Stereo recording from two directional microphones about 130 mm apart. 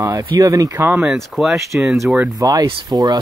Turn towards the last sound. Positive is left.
turn(degrees=-30)  # may be behind; listen again after turning